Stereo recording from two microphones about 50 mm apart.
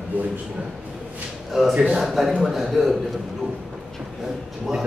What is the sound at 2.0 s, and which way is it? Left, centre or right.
Speech, centre.